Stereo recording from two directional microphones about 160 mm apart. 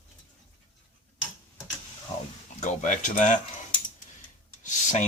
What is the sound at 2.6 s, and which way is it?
Speech, 50° left (ahead or behind).